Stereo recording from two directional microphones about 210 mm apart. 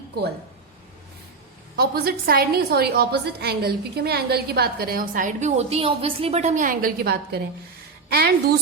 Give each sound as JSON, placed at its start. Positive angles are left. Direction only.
{"t": 1.7, "sound": "a woman's voice", "side_deg": -45}